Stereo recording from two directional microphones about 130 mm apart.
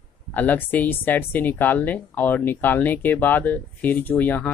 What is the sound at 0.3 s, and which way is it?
Speech, 15° left (ahead or behind).